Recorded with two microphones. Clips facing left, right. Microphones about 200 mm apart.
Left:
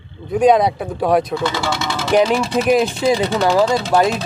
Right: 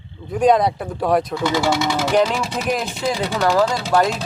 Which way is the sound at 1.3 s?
15° right (ahead or behind).